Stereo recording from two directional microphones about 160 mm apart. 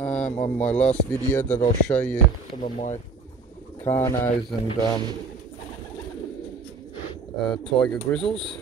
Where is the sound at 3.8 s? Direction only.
15° left (ahead or behind).